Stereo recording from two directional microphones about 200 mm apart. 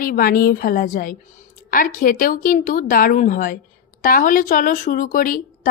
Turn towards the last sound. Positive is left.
turn(degrees=45)  # may be behind; listen again after turning